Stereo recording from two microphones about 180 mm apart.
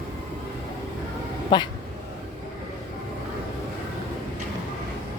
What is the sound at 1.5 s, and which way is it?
Speech, 25° left (ahead or behind).